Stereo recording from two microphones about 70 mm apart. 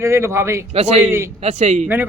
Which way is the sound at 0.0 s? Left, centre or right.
Right.